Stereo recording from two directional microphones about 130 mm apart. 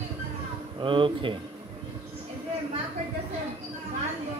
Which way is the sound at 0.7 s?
40° right (ahead or behind).